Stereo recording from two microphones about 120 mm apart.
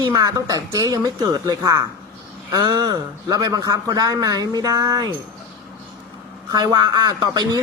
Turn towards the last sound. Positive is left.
turn(degrees=-35)  # may be behind; listen again after turning